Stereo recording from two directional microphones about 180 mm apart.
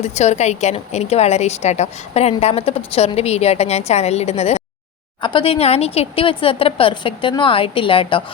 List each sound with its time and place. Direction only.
0.0 s a woman's voice: 35° left (ahead or behind)